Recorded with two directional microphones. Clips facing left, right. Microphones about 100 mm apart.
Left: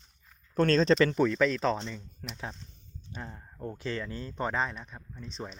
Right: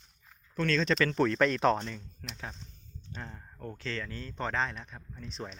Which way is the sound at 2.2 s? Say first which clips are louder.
Left 4 dB; 20° left (ahead or behind).